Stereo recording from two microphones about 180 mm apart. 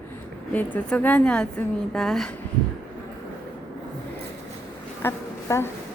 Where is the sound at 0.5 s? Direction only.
10° left (ahead or behind).